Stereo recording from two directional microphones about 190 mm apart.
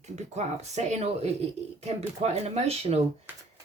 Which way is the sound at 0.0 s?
35° right (ahead or behind).